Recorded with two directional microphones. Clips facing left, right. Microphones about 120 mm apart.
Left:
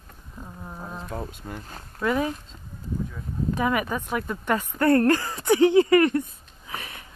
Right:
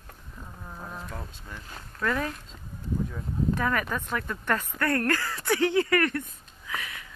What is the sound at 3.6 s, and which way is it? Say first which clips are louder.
Speech: left 3 dB; 15° left (ahead or behind).